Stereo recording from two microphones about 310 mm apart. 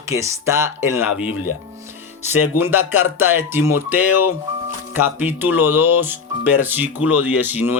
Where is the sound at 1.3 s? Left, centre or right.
Left.